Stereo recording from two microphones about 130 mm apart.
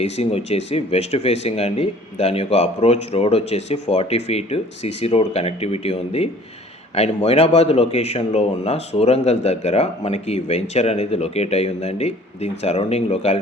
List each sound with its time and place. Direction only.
0.0 s a man's voice: 50° left (ahead or behind)